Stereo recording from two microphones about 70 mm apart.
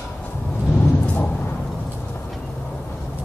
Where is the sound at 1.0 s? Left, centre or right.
Left.